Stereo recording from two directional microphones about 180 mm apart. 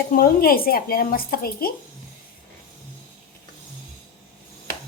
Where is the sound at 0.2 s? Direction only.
55° left (ahead or behind).